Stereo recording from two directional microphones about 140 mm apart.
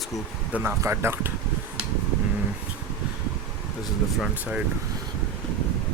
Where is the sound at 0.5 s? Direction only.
15° right (ahead or behind).